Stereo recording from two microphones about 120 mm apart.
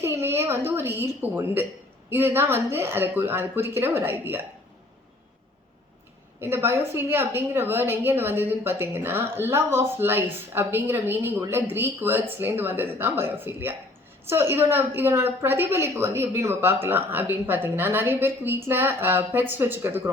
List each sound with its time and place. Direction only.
0.0 s a woman's voice: 20° right (ahead or behind)
6.4 s a woman's voice: 20° right (ahead or behind)